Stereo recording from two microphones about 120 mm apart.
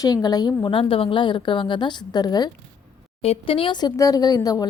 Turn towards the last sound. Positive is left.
turn(degrees=35)  # may be behind; listen again after turning